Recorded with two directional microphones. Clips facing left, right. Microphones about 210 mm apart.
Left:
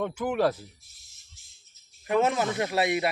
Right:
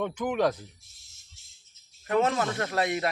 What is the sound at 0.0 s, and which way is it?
Speech, 10° left (ahead or behind).